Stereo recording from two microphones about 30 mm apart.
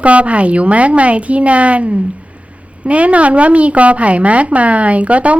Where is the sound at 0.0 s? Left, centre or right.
Right.